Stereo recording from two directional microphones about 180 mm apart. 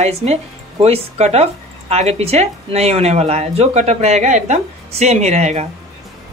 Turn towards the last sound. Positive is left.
turn(degrees=-40)  # may be behind; listen again after turning